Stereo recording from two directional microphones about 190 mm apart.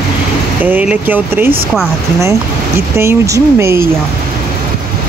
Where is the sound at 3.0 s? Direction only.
15° right (ahead or behind).